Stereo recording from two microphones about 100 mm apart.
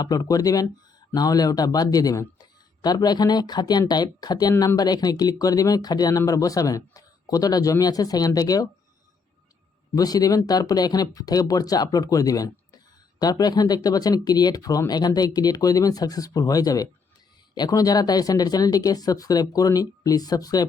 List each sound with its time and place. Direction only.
0.0 s speech: 40° left (ahead or behind)
9.9 s speech: 40° left (ahead or behind)